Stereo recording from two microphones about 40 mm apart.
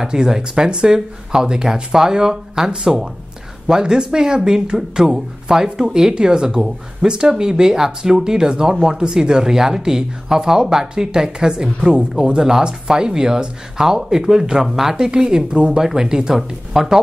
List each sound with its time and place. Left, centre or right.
0.0 s a woman's voice: centre